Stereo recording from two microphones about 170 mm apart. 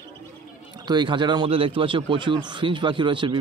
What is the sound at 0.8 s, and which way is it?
Speech, 25° right (ahead or behind).